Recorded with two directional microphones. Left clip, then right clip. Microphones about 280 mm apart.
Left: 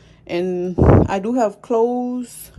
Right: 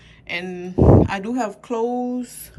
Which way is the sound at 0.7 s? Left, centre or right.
Centre.